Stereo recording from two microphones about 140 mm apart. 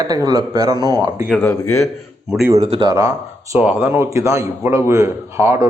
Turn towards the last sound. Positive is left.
turn(degrees=-20)  # may be behind; listen again after turning